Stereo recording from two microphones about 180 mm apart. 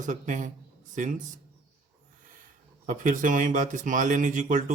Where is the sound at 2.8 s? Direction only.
45° right (ahead or behind).